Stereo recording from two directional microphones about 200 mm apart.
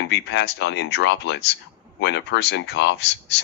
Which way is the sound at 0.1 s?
60° left (ahead or behind).